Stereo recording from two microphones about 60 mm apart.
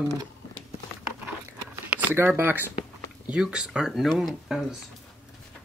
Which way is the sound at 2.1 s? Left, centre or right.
Right.